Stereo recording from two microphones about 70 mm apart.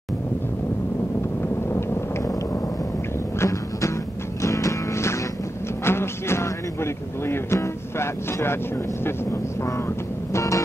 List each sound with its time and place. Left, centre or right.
1.4 s vehicle: left
3.3 s music: left
9.0 s speech: left
10.3 s vehicle: left